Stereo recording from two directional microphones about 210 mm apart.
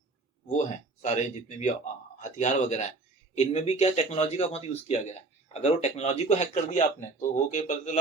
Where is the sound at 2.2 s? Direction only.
35° left (ahead or behind).